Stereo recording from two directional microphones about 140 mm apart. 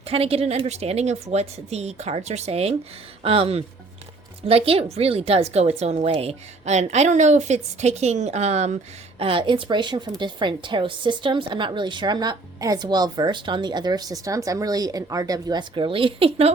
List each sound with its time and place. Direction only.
0.1 s a woman's voice: 45° right (ahead or behind)
9.1 s speech: 40° right (ahead or behind)